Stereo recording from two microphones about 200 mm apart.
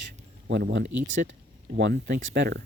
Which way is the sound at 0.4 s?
60° right (ahead or behind).